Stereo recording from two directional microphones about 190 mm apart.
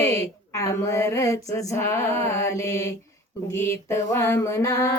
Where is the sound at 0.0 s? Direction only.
15° left (ahead or behind).